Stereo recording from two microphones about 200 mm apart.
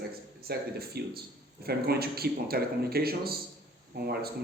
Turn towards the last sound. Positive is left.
turn(degrees=-50)  # may be behind; listen again after turning